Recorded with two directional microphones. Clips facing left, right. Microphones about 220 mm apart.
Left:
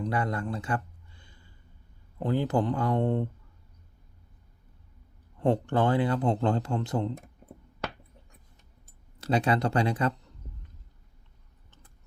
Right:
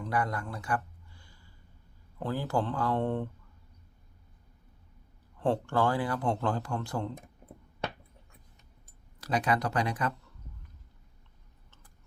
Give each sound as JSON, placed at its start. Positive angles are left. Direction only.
{"t": 0.0, "sound": "a sound", "side_deg": 25}
{"t": 2.1, "sound": "speech", "side_deg": 20}
{"t": 5.4, "sound": "speech", "side_deg": 20}
{"t": 9.2, "sound": "speech", "side_deg": 30}